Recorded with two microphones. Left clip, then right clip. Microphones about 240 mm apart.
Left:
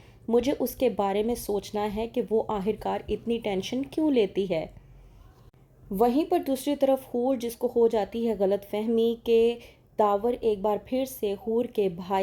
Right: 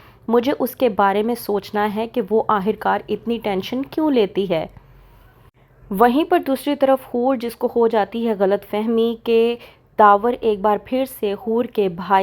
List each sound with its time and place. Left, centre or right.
0.0 s speech: centre
6.0 s speech: centre